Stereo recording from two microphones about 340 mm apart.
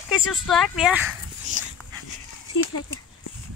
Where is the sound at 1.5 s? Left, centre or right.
Right.